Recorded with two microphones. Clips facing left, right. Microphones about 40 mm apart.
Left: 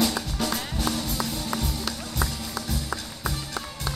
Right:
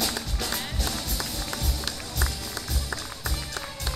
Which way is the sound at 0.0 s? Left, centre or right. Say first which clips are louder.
Left 5 dB; left.